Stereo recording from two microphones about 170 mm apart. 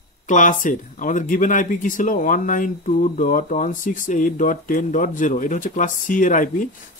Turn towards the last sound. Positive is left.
turn(degrees=50)  # may be behind; listen again after turning